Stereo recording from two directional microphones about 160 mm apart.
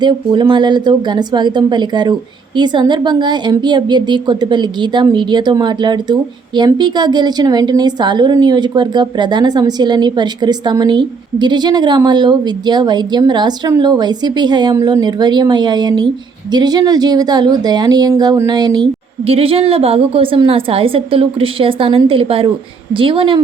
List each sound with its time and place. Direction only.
0.0 s a woman's voice: 30° right (ahead or behind)